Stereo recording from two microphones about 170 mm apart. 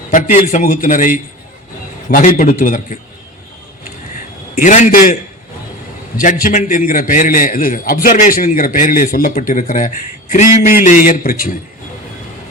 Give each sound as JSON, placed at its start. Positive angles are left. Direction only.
{"t": 0.1, "sound": "a man's voice", "side_deg": 50}
{"t": 4.5, "sound": "a man's voice", "side_deg": 45}
{"t": 6.1, "sound": "a man's voice", "side_deg": 50}